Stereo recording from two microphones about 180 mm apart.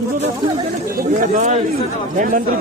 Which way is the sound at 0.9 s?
45° right (ahead or behind).